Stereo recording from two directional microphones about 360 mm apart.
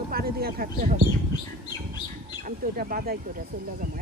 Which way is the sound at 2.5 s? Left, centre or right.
Right.